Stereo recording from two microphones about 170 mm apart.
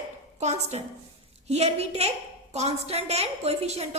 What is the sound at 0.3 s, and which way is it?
A woman's voice, 40° right (ahead or behind).